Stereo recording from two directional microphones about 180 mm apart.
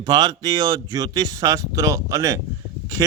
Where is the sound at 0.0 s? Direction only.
20° right (ahead or behind).